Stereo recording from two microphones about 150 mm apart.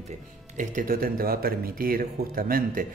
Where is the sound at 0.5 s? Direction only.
60° right (ahead or behind).